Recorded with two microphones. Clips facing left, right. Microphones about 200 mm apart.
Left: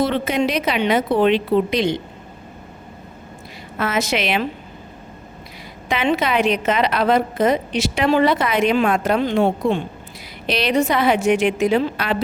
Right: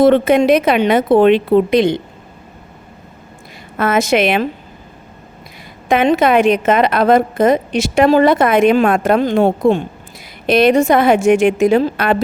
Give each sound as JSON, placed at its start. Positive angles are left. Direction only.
{"t": 0.0, "sound": "a woman's voice", "side_deg": -55}
{"t": 3.8, "sound": "a woman's voice", "side_deg": -50}
{"t": 5.9, "sound": "a woman's voice", "side_deg": -50}